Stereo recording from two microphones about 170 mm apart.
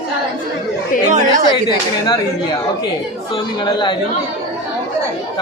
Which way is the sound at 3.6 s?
30° left (ahead or behind).